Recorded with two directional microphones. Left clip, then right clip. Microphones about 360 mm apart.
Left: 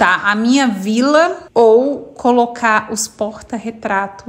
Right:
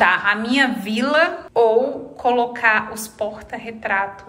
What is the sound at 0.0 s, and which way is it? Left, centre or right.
A woman's voice, centre.